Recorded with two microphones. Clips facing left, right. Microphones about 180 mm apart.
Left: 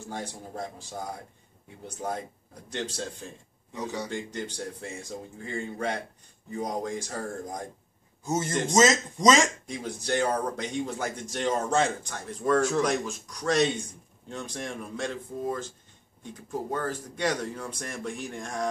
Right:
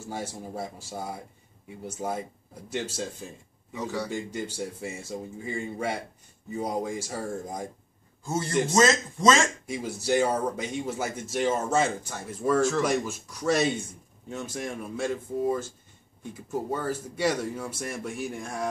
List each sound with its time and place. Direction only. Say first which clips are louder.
0.1 s speech: right 3 dB; 5° right (ahead or behind)
4.1 s speech: right 2 dB; 10° right (ahead or behind)
8.2 s a man's voice: right 1 dB; 20° left (ahead or behind)
9.7 s speech: right 3 dB; 5° right (ahead or behind)